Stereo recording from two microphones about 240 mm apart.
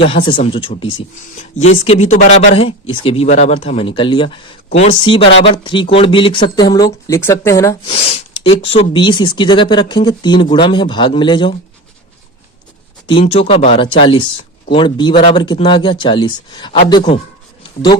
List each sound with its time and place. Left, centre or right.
0.0 s speech: left
7.9 s speech: left
13.1 s speech: left